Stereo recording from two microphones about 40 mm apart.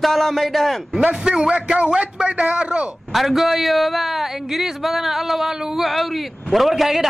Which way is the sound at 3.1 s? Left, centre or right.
Centre.